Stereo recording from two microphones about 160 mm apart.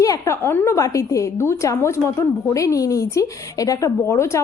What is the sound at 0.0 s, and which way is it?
Speech, 20° left (ahead or behind).